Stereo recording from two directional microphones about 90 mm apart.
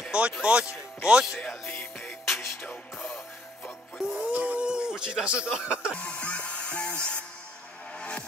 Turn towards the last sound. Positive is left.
turn(degrees=15)  # may be behind; listen again after turning